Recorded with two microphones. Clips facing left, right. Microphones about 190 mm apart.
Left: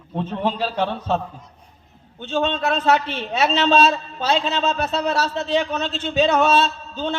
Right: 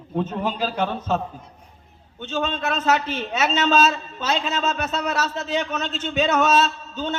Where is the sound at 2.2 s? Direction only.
35° left (ahead or behind).